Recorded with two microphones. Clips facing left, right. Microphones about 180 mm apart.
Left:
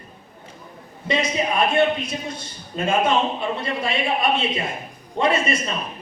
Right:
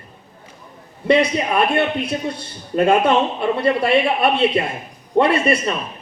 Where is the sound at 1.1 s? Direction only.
65° right (ahead or behind).